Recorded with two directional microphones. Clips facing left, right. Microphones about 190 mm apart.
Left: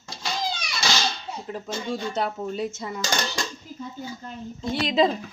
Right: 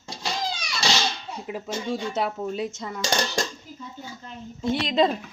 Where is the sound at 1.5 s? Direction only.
10° right (ahead or behind).